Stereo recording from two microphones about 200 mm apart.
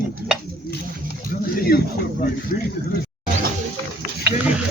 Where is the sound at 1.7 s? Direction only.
50° left (ahead or behind).